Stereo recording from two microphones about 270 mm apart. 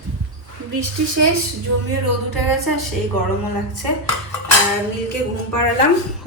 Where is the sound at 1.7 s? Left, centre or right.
Right.